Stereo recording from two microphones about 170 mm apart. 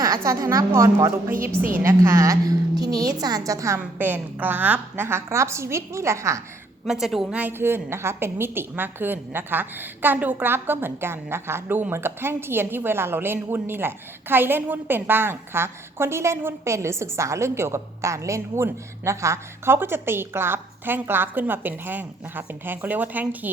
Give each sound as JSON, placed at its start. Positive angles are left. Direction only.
{"t": 0.0, "sound": "a woman's voice", "side_deg": -20}
{"t": 6.8, "sound": "a woman's voice", "side_deg": 0}